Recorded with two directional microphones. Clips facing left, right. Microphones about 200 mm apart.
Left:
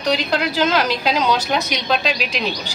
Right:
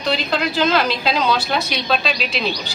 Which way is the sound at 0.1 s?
10° left (ahead or behind).